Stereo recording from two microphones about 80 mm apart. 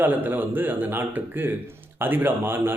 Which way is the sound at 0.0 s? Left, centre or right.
Right.